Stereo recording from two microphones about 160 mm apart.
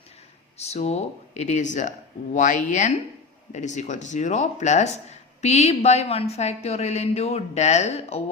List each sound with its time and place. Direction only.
0.6 s a woman's voice: 40° left (ahead or behind)